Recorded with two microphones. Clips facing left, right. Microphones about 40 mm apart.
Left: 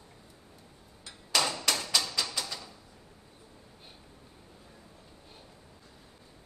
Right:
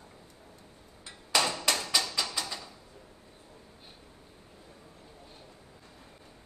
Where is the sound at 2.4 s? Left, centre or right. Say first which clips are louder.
Right 1 dB; centre.